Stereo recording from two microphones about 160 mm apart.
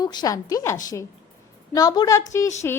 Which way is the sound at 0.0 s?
25° left (ahead or behind).